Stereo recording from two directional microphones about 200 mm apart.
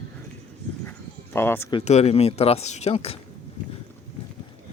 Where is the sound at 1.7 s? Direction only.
35° left (ahead or behind).